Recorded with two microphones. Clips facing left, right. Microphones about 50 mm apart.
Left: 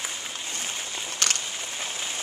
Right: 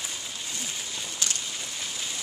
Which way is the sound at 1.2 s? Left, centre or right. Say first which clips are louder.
Left 6 dB; left.